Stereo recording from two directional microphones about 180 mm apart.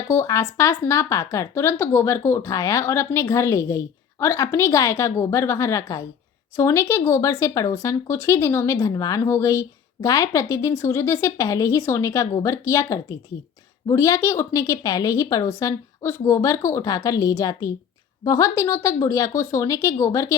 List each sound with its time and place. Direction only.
0.1 s speech: 15° left (ahead or behind)